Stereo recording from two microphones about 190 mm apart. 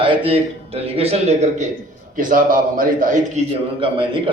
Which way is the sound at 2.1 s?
45° right (ahead or behind).